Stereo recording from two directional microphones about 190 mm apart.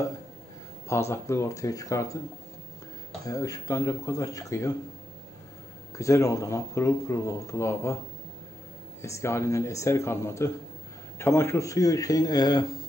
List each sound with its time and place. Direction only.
0.8 s speech: 15° left (ahead or behind)
3.3 s speech: 20° left (ahead or behind)
5.9 s speech: 15° left (ahead or behind)
9.0 s speech: 15° left (ahead or behind)